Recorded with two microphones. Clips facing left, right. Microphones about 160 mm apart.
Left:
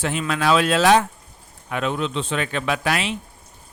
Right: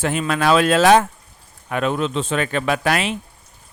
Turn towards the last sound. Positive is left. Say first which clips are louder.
# right 3 dB
turn(degrees=-50)  # may be behind; listen again after turning